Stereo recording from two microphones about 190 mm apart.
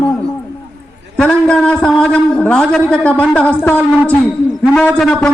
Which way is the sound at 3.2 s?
5° left (ahead or behind).